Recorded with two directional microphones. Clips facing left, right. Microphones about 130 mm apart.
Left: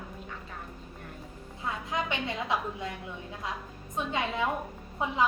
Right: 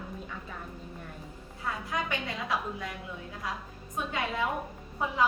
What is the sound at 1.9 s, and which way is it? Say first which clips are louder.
Speech: left 2 dB; 20° left (ahead or behind).